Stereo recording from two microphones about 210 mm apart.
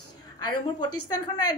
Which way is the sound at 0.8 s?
20° left (ahead or behind).